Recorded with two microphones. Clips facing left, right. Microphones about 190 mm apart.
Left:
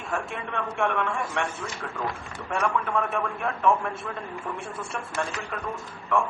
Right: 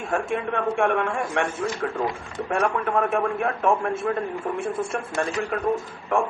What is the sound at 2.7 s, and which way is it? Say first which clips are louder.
Speech: right 4 dB; 50° right (ahead or behind).